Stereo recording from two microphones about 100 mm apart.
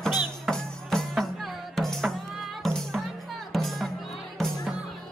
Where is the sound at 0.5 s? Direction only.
5° left (ahead or behind).